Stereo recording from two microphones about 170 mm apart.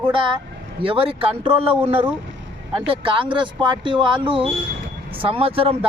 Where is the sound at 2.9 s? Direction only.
30° right (ahead or behind).